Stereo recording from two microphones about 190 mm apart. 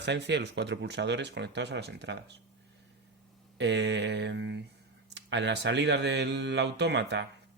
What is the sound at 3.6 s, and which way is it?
Speech, 65° right (ahead or behind).